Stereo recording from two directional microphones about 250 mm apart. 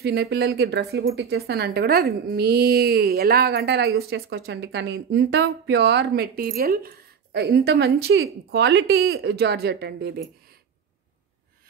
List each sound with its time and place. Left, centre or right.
0.0 s speech: right